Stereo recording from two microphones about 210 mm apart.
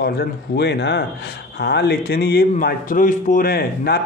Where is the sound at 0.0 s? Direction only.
50° left (ahead or behind).